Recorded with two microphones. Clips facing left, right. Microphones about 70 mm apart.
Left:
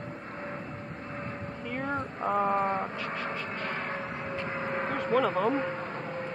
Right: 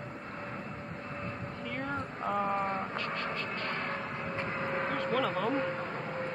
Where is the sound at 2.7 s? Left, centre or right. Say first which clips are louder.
Left 3 dB; centre.